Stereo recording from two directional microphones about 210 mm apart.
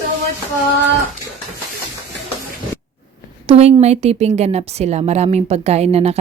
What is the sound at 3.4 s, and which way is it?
A woman's voice, 30° right (ahead or behind).